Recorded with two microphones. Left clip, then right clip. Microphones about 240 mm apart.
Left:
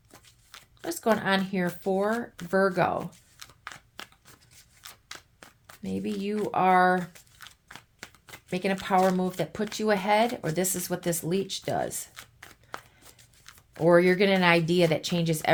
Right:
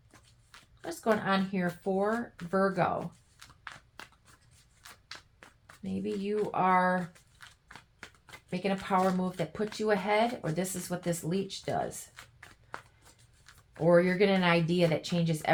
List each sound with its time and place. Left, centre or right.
0.1 s speech: left
4.0 s scissors: left
5.8 s speech: left
13.4 s speech: left